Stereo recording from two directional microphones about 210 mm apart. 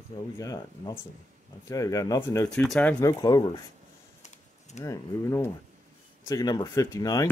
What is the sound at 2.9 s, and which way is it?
Speech, 15° left (ahead or behind).